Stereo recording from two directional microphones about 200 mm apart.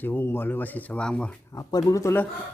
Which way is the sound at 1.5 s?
15° left (ahead or behind).